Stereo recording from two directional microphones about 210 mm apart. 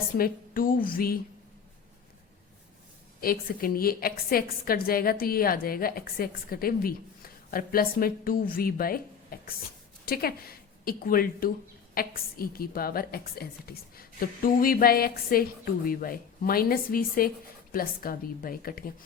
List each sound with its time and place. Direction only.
0.2 s a woman's voice: 40° left (ahead or behind)
3.2 s a woman's voice: 45° left (ahead or behind)